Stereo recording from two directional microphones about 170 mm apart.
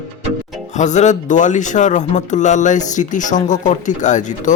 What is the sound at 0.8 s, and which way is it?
Speech, 45° left (ahead or behind).